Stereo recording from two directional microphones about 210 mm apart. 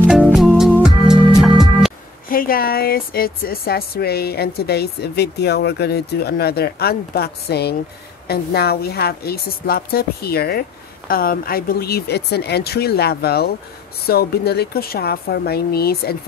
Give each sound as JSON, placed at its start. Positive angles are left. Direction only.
{"t": 0.1, "sound": "music", "side_deg": 0}
{"t": 2.2, "sound": "speech", "side_deg": 45}